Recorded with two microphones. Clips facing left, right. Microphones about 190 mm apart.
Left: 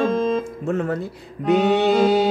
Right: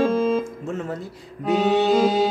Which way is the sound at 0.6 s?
60° left (ahead or behind).